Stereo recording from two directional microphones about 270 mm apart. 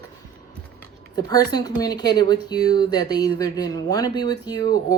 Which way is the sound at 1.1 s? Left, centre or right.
Centre.